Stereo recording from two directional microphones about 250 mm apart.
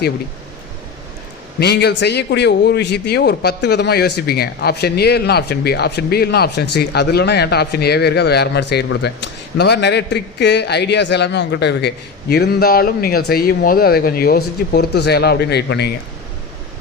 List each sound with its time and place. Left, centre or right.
1.5 s a man's voice: left